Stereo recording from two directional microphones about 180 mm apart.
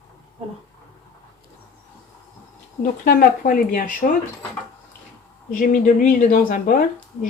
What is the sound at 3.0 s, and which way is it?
Speech, 50° left (ahead or behind).